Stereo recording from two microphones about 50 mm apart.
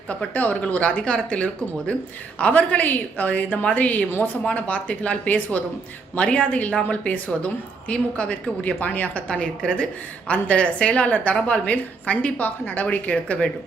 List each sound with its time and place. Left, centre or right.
0.6 s a woman's voice: left
2.5 s a woman's voice: left